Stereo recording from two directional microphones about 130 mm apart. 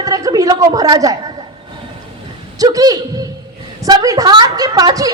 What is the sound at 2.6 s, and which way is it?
A man's voice, 30° right (ahead or behind).